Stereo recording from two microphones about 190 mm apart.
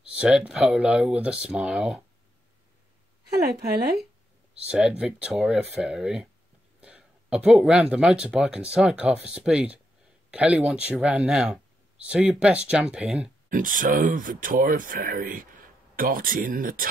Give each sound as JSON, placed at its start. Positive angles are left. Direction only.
{"t": 0.0, "sound": "speech", "side_deg": -5}
{"t": 4.6, "sound": "speech", "side_deg": -5}
{"t": 13.5, "sound": "speech", "side_deg": -45}